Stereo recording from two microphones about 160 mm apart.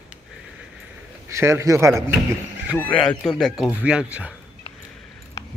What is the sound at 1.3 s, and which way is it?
Speech, 15° right (ahead or behind).